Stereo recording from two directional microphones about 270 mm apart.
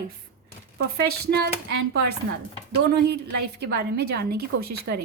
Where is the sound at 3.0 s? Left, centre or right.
Right.